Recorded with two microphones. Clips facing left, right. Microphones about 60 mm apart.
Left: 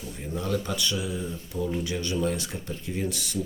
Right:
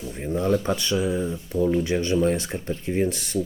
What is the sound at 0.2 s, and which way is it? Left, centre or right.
Speech, right.